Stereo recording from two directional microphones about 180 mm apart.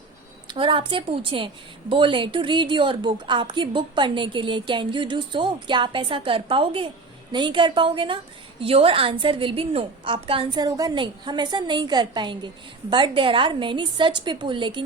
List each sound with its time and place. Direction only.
0.4 s a woman's voice: 30° right (ahead or behind)